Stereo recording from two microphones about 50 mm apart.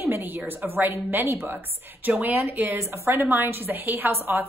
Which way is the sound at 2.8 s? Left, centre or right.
Right.